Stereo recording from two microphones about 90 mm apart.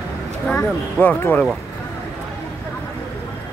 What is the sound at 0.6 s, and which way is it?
Speech, 20° left (ahead or behind).